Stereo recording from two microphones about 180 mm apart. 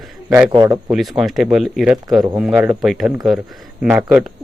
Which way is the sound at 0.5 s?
20° right (ahead or behind).